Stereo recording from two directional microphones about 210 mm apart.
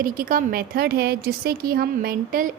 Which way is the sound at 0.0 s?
40° right (ahead or behind).